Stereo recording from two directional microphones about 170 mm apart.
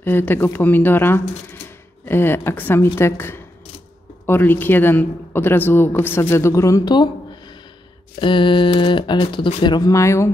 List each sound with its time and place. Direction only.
0.0 s a man's voice: 10° left (ahead or behind)